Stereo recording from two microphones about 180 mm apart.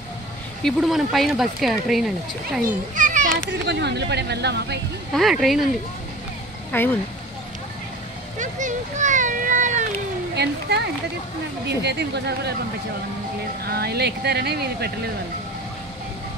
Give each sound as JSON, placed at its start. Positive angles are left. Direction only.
{"t": 0.7, "sound": "speech", "side_deg": 0}
{"t": 3.0, "sound": "children playing", "side_deg": -45}
{"t": 3.4, "sound": "speech", "side_deg": -75}
{"t": 5.1, "sound": "speech", "side_deg": 0}
{"t": 6.7, "sound": "speech", "side_deg": 10}
{"t": 8.4, "sound": "a child's voice", "side_deg": -45}
{"t": 10.3, "sound": "speech", "side_deg": -65}
{"t": 13.7, "sound": "speech", "side_deg": -60}